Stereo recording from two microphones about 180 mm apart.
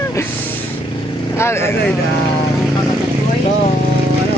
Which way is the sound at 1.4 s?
15° left (ahead or behind).